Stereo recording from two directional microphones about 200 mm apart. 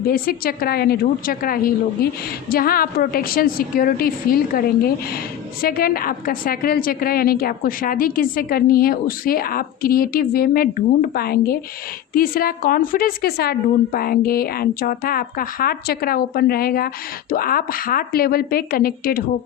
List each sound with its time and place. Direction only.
0.0 s a woman's voice: 45° left (ahead or behind)